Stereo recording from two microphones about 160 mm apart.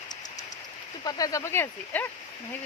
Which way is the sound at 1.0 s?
25° left (ahead or behind).